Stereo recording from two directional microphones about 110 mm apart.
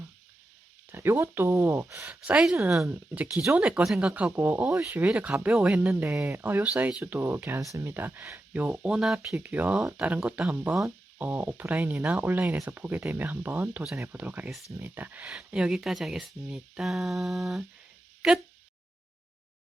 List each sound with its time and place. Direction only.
0.9 s speech: 20° right (ahead or behind)
2.0 s speech: 10° right (ahead or behind)
9.3 s speech: 15° right (ahead or behind)